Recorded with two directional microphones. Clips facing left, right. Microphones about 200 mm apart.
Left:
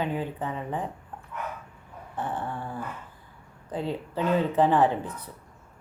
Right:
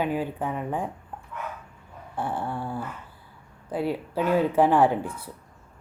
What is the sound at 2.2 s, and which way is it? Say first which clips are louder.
Speech: right 2 dB; 10° right (ahead or behind).